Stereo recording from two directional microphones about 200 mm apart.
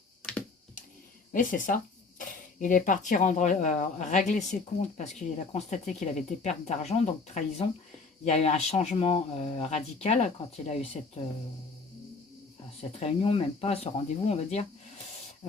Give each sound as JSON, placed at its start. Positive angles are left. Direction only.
{"t": 1.3, "sound": "speech", "side_deg": 40}
{"t": 13.0, "sound": "speech", "side_deg": 30}